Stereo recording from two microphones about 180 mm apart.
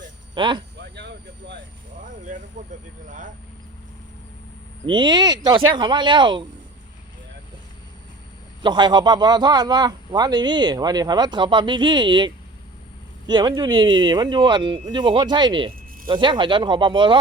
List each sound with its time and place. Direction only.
0.3 s speech: 25° right (ahead or behind)
0.8 s vehicle: 70° right (ahead or behind)
2.6 s speech: 45° right (ahead or behind)
4.9 s speech: 25° right (ahead or behind)
8.6 s speech: 25° right (ahead or behind)